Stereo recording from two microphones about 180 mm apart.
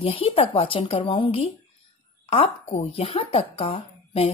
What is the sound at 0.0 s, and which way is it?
Speech, 30° left (ahead or behind).